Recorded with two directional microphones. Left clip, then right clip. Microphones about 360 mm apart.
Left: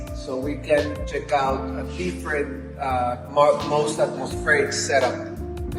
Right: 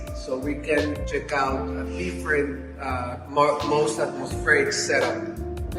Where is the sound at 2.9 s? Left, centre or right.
Left.